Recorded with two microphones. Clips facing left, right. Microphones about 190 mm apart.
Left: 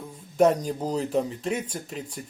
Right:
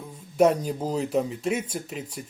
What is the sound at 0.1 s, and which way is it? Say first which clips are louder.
Speech: even; 5° right (ahead or behind).